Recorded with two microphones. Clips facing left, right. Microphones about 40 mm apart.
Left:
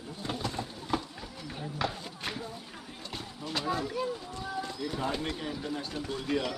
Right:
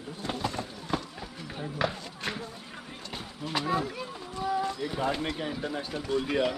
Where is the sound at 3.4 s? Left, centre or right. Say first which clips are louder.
Right 3 dB; centre.